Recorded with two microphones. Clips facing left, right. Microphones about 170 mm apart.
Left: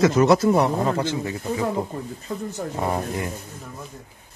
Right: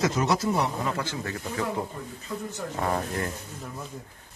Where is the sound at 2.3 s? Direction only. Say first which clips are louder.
Left 4 dB; 50° left (ahead or behind).